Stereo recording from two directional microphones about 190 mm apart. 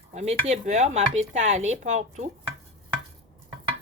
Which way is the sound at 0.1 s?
35° right (ahead or behind).